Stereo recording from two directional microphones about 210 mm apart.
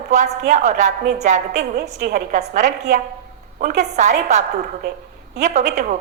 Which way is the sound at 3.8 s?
35° right (ahead or behind).